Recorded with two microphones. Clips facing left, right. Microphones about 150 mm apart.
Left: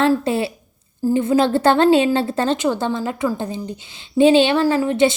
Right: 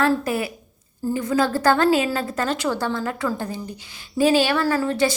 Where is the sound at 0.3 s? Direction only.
30° left (ahead or behind).